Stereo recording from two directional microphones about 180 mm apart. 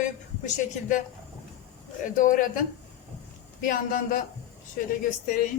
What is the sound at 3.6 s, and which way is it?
Speech, 50° left (ahead or behind).